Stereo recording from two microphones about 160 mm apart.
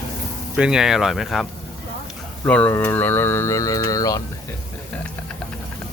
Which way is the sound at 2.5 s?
10° left (ahead or behind).